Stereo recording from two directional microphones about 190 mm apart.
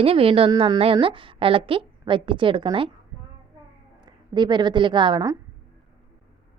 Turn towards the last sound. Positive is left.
turn(degrees=-25)  # may be behind; listen again after turning